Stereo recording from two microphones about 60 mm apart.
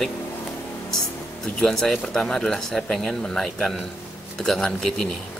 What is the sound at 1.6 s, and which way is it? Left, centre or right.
Speech, centre.